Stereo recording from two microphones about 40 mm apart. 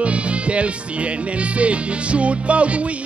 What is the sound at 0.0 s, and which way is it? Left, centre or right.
Speech, right.